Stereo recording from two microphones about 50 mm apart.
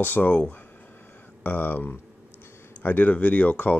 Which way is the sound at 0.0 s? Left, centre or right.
Left.